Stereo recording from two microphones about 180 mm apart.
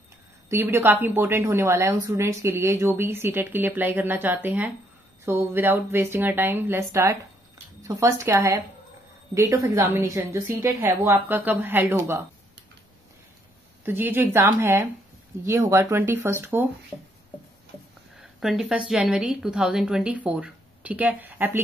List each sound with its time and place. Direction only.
0.5 s a woman's voice: 15° right (ahead or behind)
13.8 s a woman's voice: 10° right (ahead or behind)
18.1 s a woman's voice: centre (ahead or behind)